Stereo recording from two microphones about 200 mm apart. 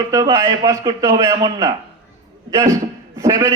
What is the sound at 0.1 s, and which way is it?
A man's voice, 15° right (ahead or behind).